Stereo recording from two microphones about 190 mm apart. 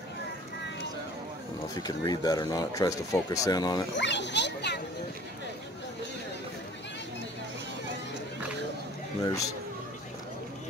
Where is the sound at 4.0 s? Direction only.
65° left (ahead or behind).